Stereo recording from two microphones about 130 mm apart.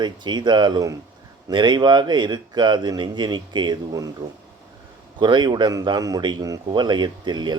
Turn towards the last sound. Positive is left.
turn(degrees=-35)  # may be behind; listen again after turning